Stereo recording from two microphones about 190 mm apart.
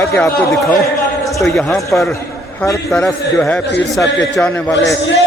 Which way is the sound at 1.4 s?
Centre (ahead or behind).